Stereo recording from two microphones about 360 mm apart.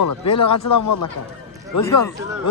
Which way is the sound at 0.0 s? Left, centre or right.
Left.